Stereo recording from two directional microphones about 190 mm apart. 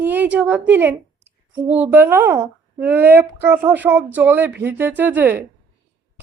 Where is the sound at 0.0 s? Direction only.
10° right (ahead or behind).